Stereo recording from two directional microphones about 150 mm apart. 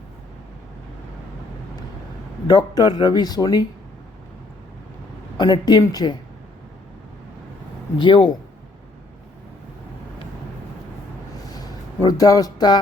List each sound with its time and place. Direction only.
2.5 s speech: 25° left (ahead or behind)
5.4 s speech: 30° left (ahead or behind)
7.9 s speech: 30° left (ahead or behind)
11.5 s a sound: 25° left (ahead or behind)